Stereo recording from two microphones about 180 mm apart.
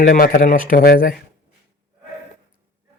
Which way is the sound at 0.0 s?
45° left (ahead or behind).